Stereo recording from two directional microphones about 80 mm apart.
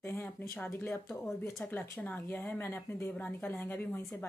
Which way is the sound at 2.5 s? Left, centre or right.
Left.